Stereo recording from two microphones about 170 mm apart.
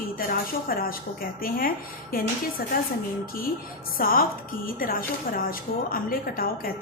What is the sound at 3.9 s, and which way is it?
Speech, 60° left (ahead or behind).